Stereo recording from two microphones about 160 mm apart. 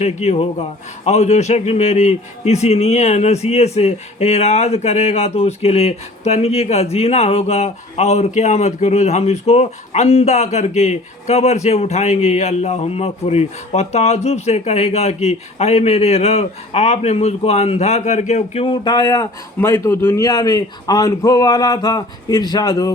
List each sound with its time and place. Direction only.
0.0 s a man's voice: 45° left (ahead or behind); by 22.9 s 25° left (ahead or behind)